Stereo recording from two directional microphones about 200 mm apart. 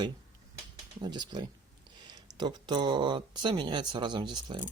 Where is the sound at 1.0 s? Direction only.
20° right (ahead or behind).